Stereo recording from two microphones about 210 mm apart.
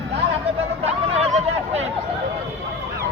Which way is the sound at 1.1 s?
30° right (ahead or behind).